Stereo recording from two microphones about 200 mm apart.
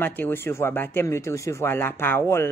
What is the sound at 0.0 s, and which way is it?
Speech, 10° left (ahead or behind).